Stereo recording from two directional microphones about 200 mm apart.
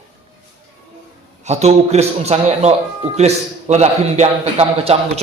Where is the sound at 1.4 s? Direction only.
35° right (ahead or behind).